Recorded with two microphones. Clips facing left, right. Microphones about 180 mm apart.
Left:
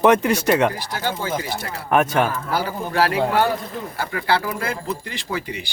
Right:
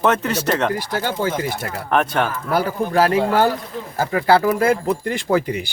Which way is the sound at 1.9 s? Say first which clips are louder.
Left 1 dB; 5° left (ahead or behind).